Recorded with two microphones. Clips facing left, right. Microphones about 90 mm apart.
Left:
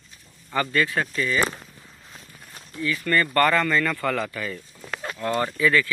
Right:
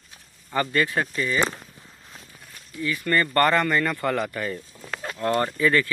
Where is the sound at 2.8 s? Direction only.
20° right (ahead or behind).